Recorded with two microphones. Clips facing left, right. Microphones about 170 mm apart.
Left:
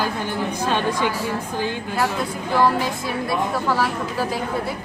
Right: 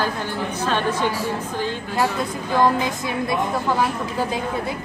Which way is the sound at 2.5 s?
20° right (ahead or behind).